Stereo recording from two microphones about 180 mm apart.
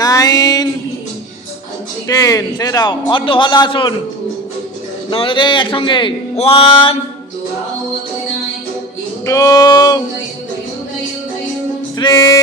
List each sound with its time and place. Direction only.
0.0 s a sound: 20° left (ahead or behind)
2.0 s a man's voice: 20° left (ahead or behind)
5.1 s a man's voice: 30° left (ahead or behind)
9.2 s a man's voice: 20° left (ahead or behind)
11.9 s a man's voice: 20° left (ahead or behind)